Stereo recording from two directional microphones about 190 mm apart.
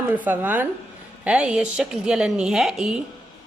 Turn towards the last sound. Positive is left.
turn(degrees=-5)  # may be behind; listen again after turning